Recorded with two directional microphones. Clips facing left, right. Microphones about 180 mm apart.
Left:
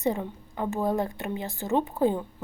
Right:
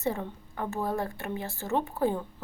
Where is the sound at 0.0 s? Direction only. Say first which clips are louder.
Left 3 dB; 15° left (ahead or behind).